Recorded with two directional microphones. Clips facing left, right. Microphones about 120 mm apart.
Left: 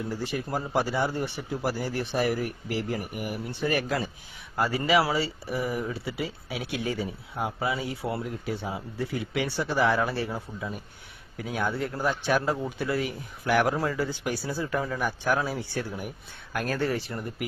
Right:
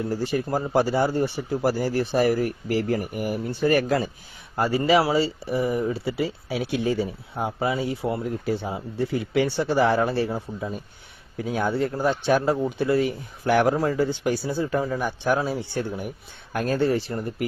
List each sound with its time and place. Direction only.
0.0 s speech: 40° right (ahead or behind)
4.5 s speech: 30° right (ahead or behind)
6.1 s speech: 35° right (ahead or behind)